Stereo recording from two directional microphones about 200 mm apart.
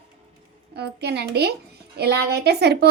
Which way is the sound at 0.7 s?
55° right (ahead or behind).